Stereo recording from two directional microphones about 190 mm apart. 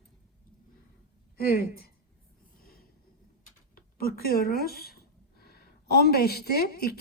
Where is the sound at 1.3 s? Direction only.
50° left (ahead or behind).